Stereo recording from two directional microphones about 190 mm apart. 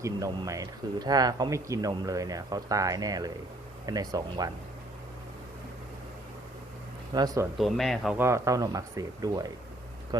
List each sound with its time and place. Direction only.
0.0 s speech: 20° right (ahead or behind)
7.1 s speech: 20° right (ahead or behind)
7.6 s speech: centre (ahead or behind)
8.2 s speech: 15° right (ahead or behind)